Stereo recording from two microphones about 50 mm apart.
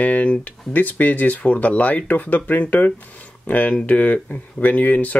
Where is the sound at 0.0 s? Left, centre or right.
Left.